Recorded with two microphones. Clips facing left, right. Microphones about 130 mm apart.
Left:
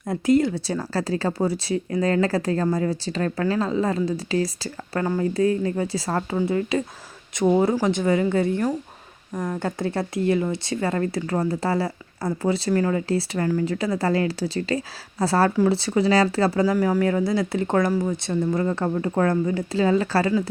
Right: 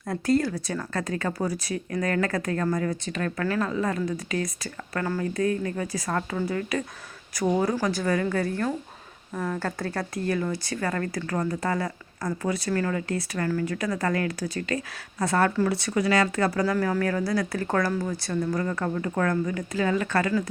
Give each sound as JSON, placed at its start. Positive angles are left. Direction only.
{"t": 0.0, "sound": "speech", "side_deg": 20}
{"t": 16.7, "sound": "speech", "side_deg": 15}